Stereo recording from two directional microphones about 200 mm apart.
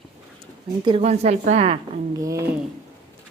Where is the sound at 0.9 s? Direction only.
30° right (ahead or behind).